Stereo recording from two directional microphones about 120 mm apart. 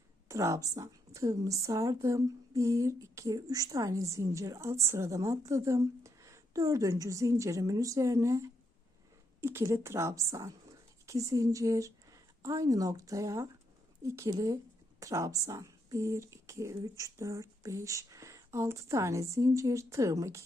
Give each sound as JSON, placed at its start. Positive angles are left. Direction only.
{"t": 0.3, "sound": "speech", "side_deg": -25}